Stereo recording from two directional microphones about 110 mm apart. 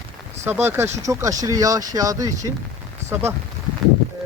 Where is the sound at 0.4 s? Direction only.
20° right (ahead or behind).